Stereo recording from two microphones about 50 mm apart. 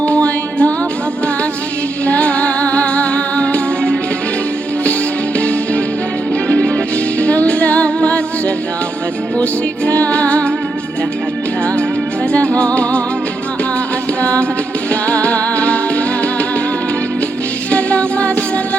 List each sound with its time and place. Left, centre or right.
0.0 s music: left
2.0 s music: left
5.4 s music: left
12.3 s music: left
14.2 s music: left
17.7 s music: left